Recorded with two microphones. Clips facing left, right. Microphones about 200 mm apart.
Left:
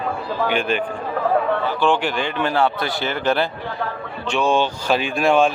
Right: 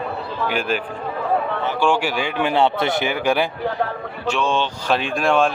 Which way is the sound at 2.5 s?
25° right (ahead or behind).